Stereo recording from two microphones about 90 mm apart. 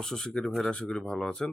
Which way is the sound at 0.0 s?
5° left (ahead or behind).